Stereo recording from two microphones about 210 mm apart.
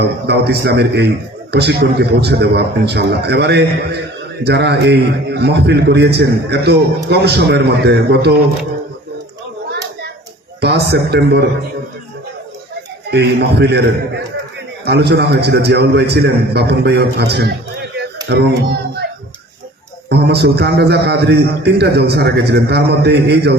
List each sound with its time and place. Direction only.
0.0 s a man's voice: 55° right (ahead or behind)
10.6 s a man's voice: 50° right (ahead or behind)
13.1 s a man's voice: 50° right (ahead or behind)
14.8 s a man's voice: 50° right (ahead or behind)
20.1 s a man's voice: 50° right (ahead or behind)